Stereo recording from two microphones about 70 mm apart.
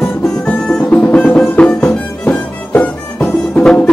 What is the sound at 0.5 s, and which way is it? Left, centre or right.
Music, centre.